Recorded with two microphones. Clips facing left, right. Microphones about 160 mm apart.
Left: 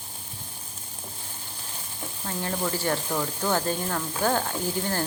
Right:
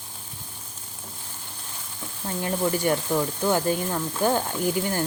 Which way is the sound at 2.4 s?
15° right (ahead or behind).